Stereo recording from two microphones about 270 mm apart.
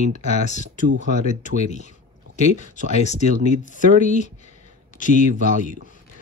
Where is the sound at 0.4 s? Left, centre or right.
Left.